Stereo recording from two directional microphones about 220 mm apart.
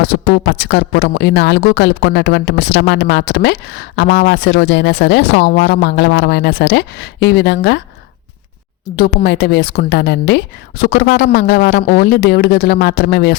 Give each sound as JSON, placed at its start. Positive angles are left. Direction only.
{"t": 0.4, "sound": "speech", "side_deg": 45}
{"t": 9.0, "sound": "speech", "side_deg": 45}